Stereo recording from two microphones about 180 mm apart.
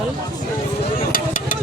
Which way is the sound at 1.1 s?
50° left (ahead or behind).